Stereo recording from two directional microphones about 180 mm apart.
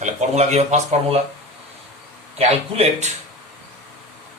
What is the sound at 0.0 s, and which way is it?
Speech, 40° right (ahead or behind).